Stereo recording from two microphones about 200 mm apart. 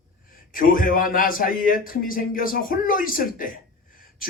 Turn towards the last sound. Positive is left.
turn(degrees=45)  # may be behind; listen again after turning